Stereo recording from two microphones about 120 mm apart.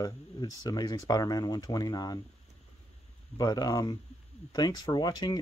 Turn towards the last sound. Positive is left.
turn(degrees=35)  # may be behind; listen again after turning